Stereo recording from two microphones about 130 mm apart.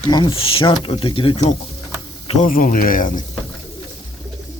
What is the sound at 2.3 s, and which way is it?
Speech, 80° left.